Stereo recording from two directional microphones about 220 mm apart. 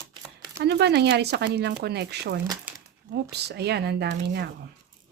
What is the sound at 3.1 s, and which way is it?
Speech, 50° right (ahead or behind).